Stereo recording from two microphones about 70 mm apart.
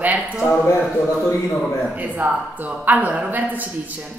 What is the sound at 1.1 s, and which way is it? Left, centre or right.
Speech, centre.